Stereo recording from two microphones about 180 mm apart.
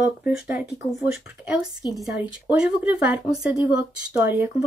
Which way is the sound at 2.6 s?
5° right (ahead or behind).